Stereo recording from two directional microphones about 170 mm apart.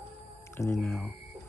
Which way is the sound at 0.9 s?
Centre (ahead or behind).